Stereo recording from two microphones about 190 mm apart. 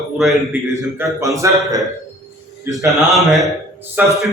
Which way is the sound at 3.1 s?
Centre (ahead or behind).